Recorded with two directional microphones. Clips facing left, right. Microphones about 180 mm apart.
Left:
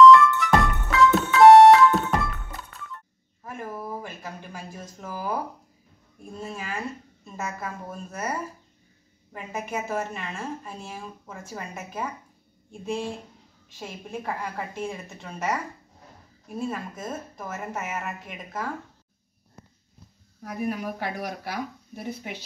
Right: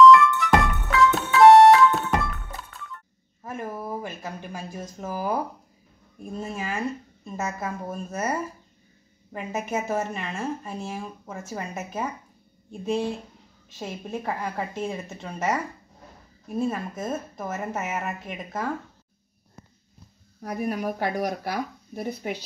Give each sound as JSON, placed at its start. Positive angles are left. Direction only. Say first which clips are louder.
{"t": 0.0, "sound": "music", "louder": "left 1 dB", "side_deg": 0}
{"t": 3.4, "sound": "a sound", "louder": "right 2 dB", "side_deg": -20}
{"t": 6.5, "sound": "a sound", "louder": "right 3 dB", "side_deg": -20}
{"t": 7.2, "sound": "a woman's voice", "louder": "right 3 dB", "side_deg": -20}
{"t": 9.3, "sound": "a woman's voice", "louder": "right 3 dB", "side_deg": -20}
{"t": 16.5, "sound": "a woman's voice", "louder": "right 4 dB", "side_deg": -20}
{"t": 20.4, "sound": "speech", "louder": "right 2 dB", "side_deg": -45}